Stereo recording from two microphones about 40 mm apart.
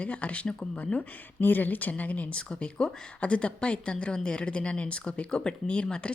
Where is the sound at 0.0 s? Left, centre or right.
Left.